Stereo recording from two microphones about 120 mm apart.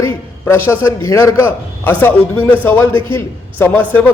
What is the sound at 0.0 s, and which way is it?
A man's voice, 20° left (ahead or behind).